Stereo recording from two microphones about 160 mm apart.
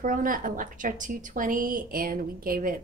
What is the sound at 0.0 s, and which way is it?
A woman's voice, 60° right (ahead or behind).